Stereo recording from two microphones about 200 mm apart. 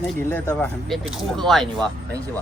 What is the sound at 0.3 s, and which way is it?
Speech, 10° left (ahead or behind).